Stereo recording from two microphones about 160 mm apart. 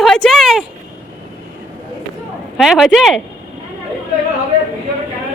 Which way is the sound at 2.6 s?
Centre (ahead or behind).